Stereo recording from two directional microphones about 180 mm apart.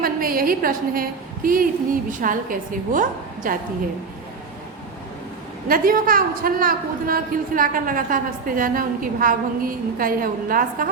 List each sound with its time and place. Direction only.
0.0 s a woman's voice: 55° right (ahead or behind)
5.6 s a woman's voice: 50° right (ahead or behind)